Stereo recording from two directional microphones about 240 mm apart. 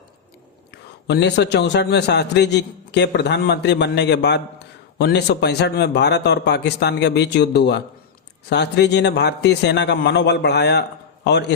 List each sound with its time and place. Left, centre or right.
0.7 s a man's voice: left